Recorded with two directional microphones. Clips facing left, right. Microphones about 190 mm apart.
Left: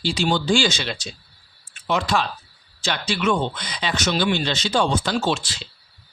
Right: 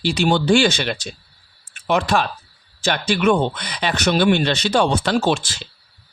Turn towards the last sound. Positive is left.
turn(degrees=-50)  # may be behind; listen again after turning